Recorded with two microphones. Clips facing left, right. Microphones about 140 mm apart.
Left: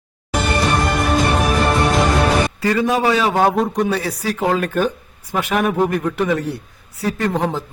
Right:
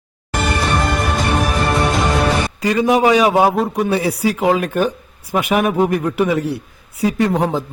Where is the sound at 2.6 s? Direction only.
15° right (ahead or behind).